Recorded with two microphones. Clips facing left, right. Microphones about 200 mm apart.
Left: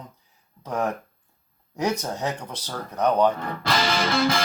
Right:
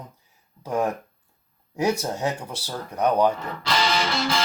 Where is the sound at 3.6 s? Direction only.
50° left (ahead or behind).